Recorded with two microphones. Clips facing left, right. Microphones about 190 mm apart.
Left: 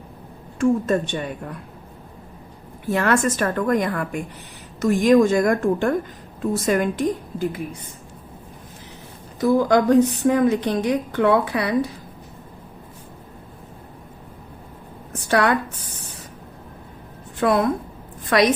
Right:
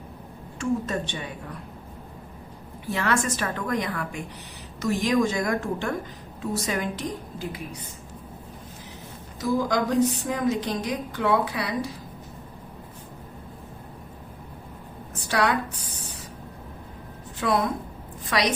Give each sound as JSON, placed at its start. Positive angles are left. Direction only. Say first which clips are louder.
{"t": 0.6, "sound": "a woman's voice", "louder": "left 8 dB", "side_deg": 50}
{"t": 2.8, "sound": "a woman's voice", "louder": "left 6 dB", "side_deg": 50}
{"t": 9.4, "sound": "a woman's voice", "louder": "left 7 dB", "side_deg": 60}
{"t": 15.3, "sound": "a woman's voice", "louder": "left 5 dB", "side_deg": 55}
{"t": 17.4, "sound": "a woman's voice", "louder": "left 5 dB", "side_deg": 55}